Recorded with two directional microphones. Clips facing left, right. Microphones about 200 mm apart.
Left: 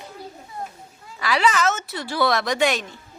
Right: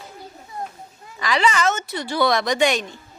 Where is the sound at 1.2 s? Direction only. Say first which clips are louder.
Even; 5° left (ahead or behind).